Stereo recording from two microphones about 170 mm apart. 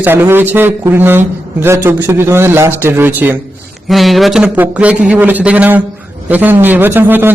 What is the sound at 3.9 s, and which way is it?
A man's voice, centre (ahead or behind).